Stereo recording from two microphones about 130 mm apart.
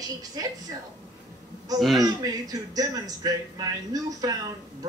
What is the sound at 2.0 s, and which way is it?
A man's voice, 30° right (ahead or behind).